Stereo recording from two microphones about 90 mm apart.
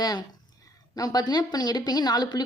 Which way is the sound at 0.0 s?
45° left (ahead or behind).